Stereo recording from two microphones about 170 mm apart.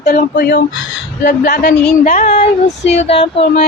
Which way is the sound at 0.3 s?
85° left.